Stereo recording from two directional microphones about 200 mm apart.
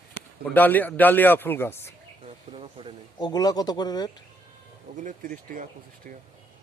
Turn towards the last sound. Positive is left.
turn(degrees=-45)  # may be behind; listen again after turning